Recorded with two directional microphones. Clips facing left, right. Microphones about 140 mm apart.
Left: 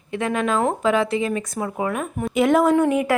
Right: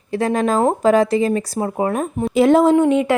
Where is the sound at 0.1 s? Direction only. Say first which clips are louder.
Right 4 dB; 35° right (ahead or behind).